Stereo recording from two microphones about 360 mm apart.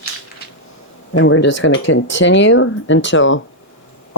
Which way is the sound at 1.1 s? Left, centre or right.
Left.